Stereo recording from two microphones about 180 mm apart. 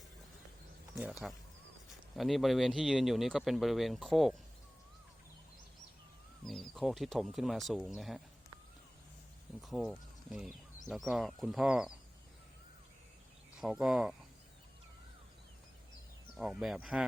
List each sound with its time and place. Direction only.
0.9 s speech: 5° right (ahead or behind)
6.4 s speech: centre (ahead or behind)
9.6 s speech: centre (ahead or behind)
13.6 s speech: 5° right (ahead or behind)
16.4 s speech: 5° right (ahead or behind)